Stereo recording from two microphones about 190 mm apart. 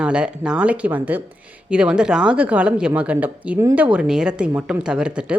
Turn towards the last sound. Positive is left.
turn(degrees=-5)  # may be behind; listen again after turning